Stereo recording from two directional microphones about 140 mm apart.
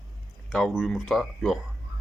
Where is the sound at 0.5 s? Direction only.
Centre (ahead or behind).